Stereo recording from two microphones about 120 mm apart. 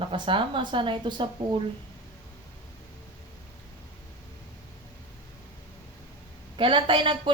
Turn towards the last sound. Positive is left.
turn(degrees=-45)  # may be behind; listen again after turning